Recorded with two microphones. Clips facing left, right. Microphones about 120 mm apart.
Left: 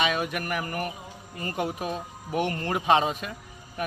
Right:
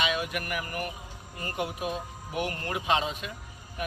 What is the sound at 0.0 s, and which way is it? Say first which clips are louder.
A man's voice: left 3 dB; 45° left (ahead or behind).